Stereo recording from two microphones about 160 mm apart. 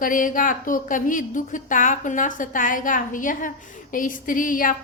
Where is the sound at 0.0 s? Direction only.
55° left (ahead or behind).